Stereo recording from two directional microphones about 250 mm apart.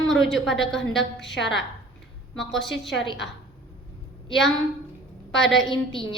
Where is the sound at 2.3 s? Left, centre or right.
Centre.